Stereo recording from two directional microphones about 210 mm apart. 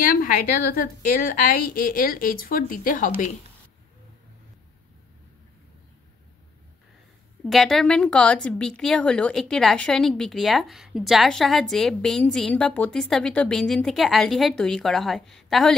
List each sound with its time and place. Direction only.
0.0 s a woman's voice: 40° left (ahead or behind)
7.4 s a woman's voice: centre (ahead or behind)